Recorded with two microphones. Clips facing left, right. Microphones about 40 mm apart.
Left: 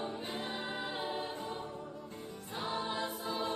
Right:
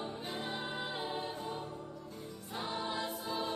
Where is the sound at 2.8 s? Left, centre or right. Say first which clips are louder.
Left 1 dB; centre.